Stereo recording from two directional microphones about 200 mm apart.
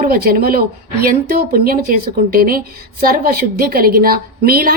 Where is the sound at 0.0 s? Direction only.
45° right (ahead or behind).